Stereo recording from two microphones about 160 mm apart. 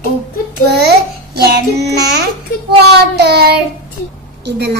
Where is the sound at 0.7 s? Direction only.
90° right.